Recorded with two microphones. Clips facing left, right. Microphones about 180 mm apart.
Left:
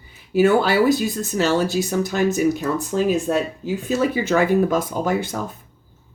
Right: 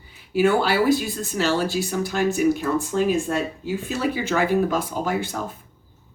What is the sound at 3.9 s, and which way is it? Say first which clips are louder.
Speech: left 5 dB; 45° left (ahead or behind).